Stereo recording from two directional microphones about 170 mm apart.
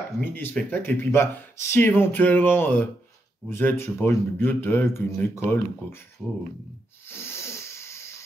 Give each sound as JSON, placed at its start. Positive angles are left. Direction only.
{"t": 0.2, "sound": "speech", "side_deg": 10}
{"t": 7.1, "sound": "wheeze", "side_deg": 15}